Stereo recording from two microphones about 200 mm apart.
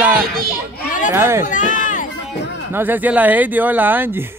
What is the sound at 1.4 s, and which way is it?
Run, 40° left (ahead or behind).